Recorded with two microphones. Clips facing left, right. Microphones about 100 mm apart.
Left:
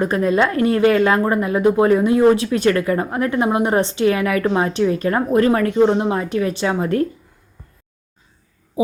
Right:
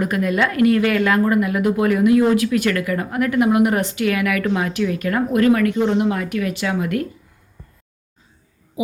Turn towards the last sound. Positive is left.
turn(degrees=35)  # may be behind; listen again after turning